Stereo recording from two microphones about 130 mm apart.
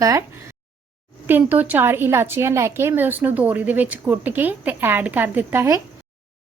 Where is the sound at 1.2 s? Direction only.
15° right (ahead or behind).